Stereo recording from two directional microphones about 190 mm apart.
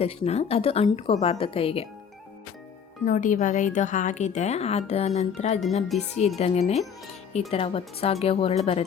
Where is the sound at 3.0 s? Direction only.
40° left (ahead or behind).